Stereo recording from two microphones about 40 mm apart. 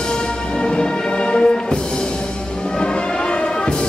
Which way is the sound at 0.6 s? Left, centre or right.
Left.